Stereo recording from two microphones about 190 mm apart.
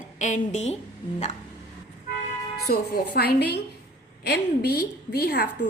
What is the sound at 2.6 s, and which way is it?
A woman's voice, 55° left (ahead or behind).